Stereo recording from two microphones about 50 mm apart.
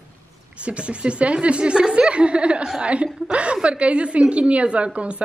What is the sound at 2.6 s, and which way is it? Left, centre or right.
A woman's voice, centre.